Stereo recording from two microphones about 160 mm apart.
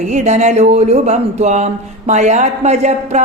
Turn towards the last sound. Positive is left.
turn(degrees=-45)  # may be behind; listen again after turning